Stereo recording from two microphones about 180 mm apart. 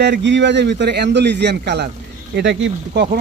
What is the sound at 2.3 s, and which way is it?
Speech, 85° right.